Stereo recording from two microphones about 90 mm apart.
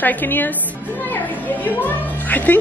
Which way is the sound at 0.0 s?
20° left (ahead or behind).